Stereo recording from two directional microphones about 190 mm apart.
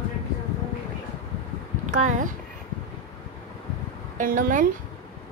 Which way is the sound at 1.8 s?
40° right (ahead or behind).